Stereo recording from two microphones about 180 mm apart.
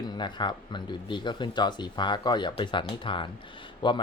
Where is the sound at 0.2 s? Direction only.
25° left (ahead or behind).